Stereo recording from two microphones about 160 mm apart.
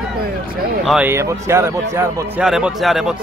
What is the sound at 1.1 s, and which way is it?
A man's voice, 15° right (ahead or behind).